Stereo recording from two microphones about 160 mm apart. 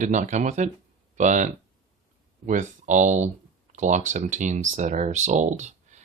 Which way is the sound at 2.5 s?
50° right (ahead or behind).